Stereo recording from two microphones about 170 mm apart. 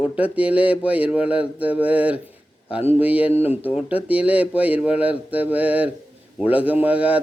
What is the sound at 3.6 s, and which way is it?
A man's voice, 10° right (ahead or behind).